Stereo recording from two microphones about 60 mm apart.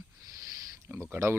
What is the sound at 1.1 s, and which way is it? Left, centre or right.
Speech, right.